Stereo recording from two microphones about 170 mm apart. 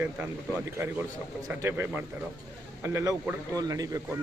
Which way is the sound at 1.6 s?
15° right (ahead or behind).